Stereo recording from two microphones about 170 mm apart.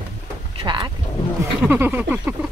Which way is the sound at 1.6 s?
10° right (ahead or behind).